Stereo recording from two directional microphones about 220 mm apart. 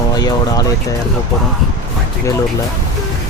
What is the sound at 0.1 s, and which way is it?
Speech, 15° left (ahead or behind).